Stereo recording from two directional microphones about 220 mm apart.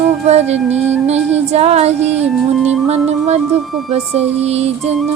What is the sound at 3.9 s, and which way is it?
A woman's voice, 30° right (ahead or behind).